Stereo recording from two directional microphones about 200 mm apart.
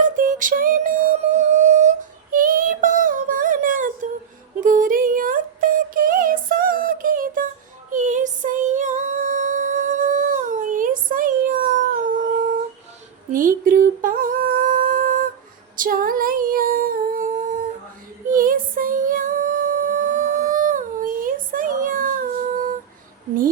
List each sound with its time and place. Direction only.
0.2 s music: 40° right (ahead or behind)
2.3 s a sound: 45° right (ahead or behind)
4.6 s female singing: 40° right (ahead or behind)
7.9 s music: 40° right (ahead or behind)
13.3 s a sound: 40° right (ahead or behind)
15.7 s humming: 45° right (ahead or behind)
18.3 s music: 45° right (ahead or behind)